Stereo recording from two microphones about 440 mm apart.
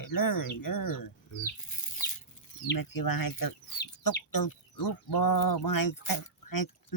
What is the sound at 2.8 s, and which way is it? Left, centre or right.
Speech, left.